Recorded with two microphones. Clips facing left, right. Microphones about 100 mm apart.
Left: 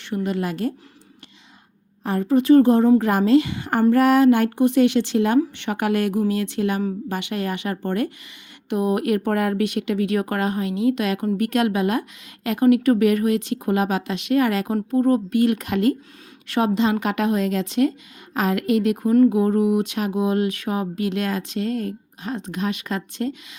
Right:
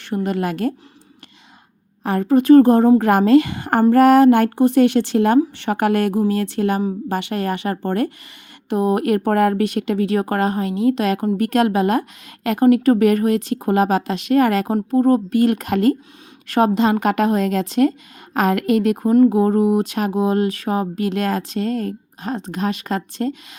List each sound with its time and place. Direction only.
0.0 s speech: 45° right (ahead or behind)
2.0 s speech: 60° right (ahead or behind); by 23.6 s 40° right (ahead or behind)